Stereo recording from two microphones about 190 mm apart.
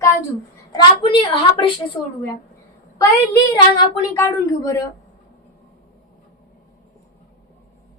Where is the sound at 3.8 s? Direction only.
15° left (ahead or behind).